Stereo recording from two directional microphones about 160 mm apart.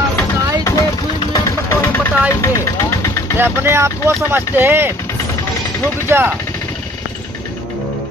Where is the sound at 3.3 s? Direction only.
15° right (ahead or behind).